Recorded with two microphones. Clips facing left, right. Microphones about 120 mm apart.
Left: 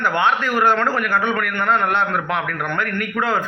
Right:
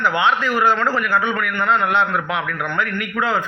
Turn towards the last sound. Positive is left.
turn(degrees=45)  # may be behind; listen again after turning